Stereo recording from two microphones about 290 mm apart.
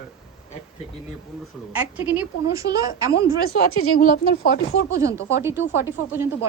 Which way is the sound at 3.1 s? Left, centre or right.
Left.